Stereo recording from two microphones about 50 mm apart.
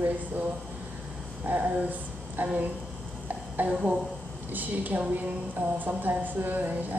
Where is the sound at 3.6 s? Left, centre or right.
Right.